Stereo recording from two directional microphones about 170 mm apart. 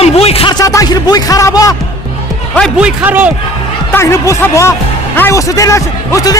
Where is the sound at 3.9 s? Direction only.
15° left (ahead or behind).